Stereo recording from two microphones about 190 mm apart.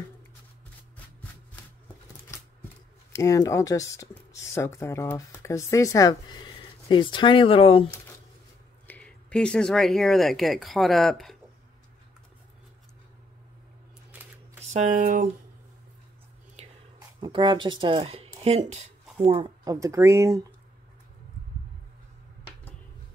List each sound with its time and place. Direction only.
3.1 s speech: 15° left (ahead or behind)
8.8 s speech: 5° left (ahead or behind)
14.6 s speech: 40° right (ahead or behind)
17.2 s speech: 25° right (ahead or behind)